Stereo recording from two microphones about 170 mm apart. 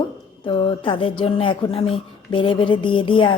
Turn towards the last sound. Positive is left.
turn(degrees=30)  # may be behind; listen again after turning